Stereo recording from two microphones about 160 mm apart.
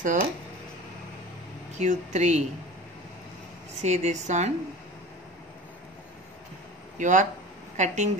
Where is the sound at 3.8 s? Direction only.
45° right (ahead or behind).